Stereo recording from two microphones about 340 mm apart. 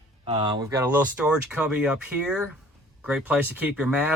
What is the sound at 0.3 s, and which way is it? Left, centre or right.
Speech, centre.